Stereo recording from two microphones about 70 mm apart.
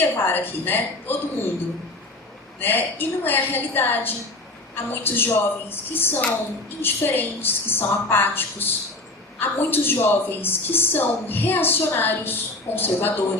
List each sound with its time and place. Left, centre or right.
0.0 s a woman's voice: left
2.6 s a woman's voice: left